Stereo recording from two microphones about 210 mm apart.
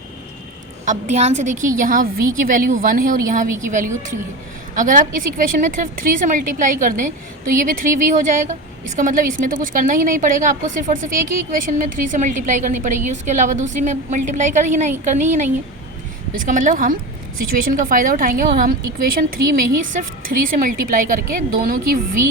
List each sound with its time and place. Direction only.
0.9 s a woman's voice: 35° right (ahead or behind)
16.5 s a woman's voice: 40° right (ahead or behind)